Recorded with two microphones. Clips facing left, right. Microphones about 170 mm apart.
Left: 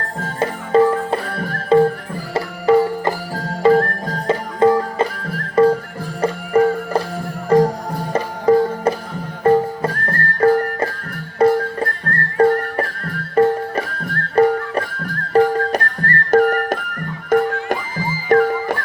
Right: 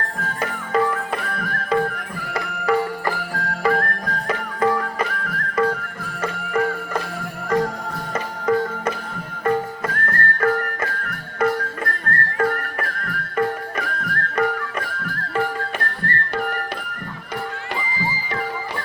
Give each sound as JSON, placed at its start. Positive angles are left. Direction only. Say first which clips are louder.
{"t": 0.2, "sound": "music", "louder": "left 7 dB", "side_deg": 30}